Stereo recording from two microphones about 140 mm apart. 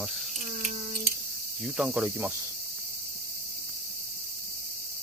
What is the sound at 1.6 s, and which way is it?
Cricket, 5° right (ahead or behind).